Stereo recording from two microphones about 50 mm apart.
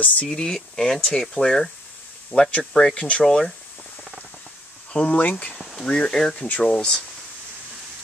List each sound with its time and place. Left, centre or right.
0.3 s speech: centre
2.3 s speech: left
4.9 s speech: left
5.6 s a sound: centre
5.9 s speech: centre